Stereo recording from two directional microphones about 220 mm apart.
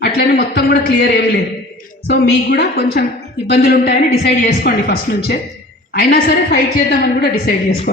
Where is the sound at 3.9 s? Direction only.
30° left (ahead or behind).